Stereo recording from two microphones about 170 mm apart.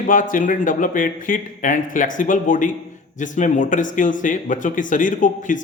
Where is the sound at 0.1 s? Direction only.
50° left (ahead or behind).